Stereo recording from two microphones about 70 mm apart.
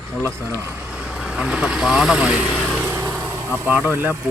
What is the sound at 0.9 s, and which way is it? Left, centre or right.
Vehicle, centre.